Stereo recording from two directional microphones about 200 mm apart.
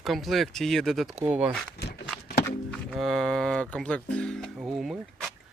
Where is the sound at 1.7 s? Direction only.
60° left (ahead or behind).